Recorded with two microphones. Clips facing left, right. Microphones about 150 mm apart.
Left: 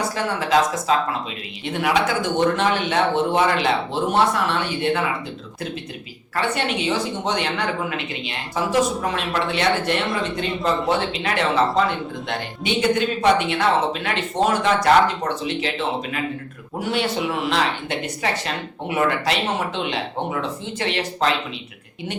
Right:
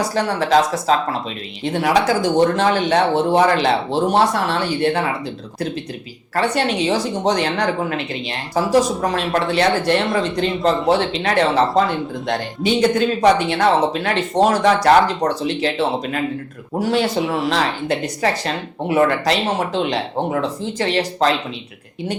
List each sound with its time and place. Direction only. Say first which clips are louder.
0.1 s speech: right 5 dB; 35° right (ahead or behind)
6.3 s speech: right 4 dB; 35° right (ahead or behind)